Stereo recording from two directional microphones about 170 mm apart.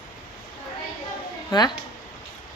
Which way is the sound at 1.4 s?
25° left (ahead or behind).